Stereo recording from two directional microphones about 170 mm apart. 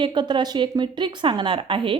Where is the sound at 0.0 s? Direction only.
25° right (ahead or behind).